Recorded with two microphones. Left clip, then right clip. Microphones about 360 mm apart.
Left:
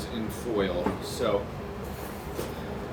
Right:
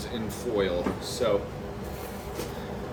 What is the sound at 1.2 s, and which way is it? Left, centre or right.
Speech, centre.